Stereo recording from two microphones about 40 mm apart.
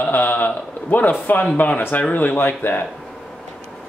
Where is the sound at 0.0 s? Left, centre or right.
Left.